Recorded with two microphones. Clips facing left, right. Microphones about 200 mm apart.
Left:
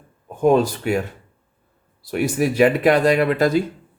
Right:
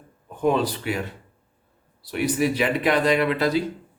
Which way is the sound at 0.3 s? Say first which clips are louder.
Left 6 dB; 45° left (ahead or behind).